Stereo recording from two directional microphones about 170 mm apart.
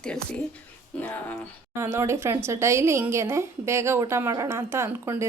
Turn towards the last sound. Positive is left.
turn(degrees=-15)  # may be behind; listen again after turning